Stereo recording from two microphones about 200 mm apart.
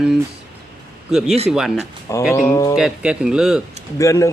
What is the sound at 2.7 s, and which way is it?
Speech, 5° right (ahead or behind).